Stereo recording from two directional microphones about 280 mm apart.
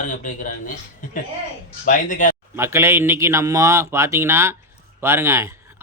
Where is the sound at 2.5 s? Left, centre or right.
Centre.